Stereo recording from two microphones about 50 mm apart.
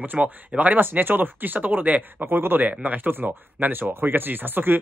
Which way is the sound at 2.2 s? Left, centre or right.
Right.